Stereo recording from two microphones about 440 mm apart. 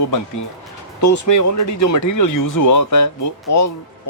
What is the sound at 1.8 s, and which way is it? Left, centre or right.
Speech, left.